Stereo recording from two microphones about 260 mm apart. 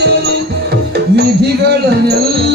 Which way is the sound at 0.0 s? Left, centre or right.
Right.